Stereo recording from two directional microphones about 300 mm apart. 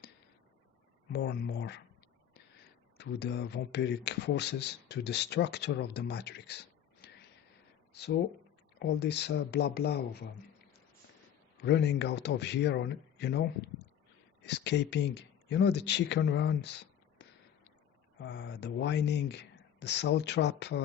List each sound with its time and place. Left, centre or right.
1.1 s speech: left
3.0 s speech: left
11.6 s speech: left